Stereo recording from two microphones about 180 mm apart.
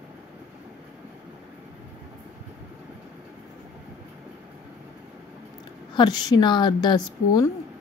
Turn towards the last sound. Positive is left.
turn(degrees=20)  # may be behind; listen again after turning